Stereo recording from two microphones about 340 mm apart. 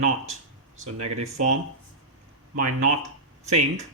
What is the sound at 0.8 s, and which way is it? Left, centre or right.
Speech, right.